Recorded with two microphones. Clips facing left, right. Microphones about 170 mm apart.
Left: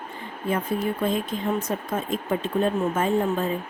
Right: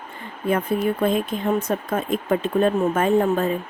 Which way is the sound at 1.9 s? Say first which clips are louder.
Right 4 dB; 65° right (ahead or behind).